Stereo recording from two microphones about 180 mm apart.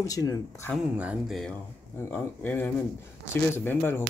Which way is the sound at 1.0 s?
5° right (ahead or behind).